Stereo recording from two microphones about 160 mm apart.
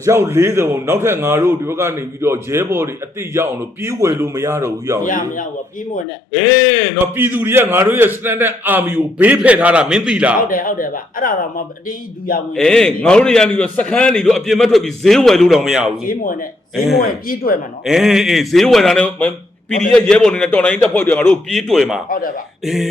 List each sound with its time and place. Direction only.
0.0 s a man's voice: 20° right (ahead or behind)
5.0 s speech: 55° left (ahead or behind)
7.2 s a man's voice: 10° right (ahead or behind)
10.4 s speech: 60° left (ahead or behind)
12.5 s a man's voice: 5° left (ahead or behind)
17.0 s speech: 65° left (ahead or behind)
17.8 s a man's voice: 5° right (ahead or behind)